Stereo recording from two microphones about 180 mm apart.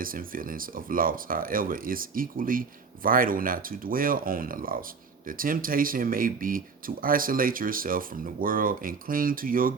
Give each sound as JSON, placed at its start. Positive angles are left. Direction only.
{"t": 0.0, "sound": "speech", "side_deg": -50}